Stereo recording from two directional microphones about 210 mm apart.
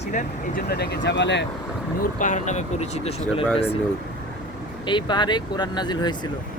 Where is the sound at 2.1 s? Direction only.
35° left (ahead or behind).